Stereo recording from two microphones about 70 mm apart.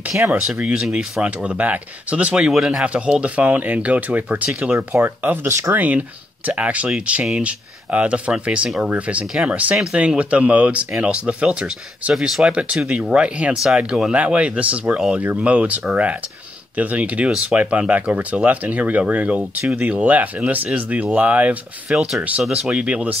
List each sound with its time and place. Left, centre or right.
0.1 s speech: right
0.6 s speech: centre
0.8 s speech: centre
1.2 s speech: centre
2.8 s speech: centre
5.0 s speech: right
5.5 s speech: right
5.8 s speech: right
9.3 s speech: centre
9.9 s speech: centre
12.1 s speech: centre
21.9 s speech: centre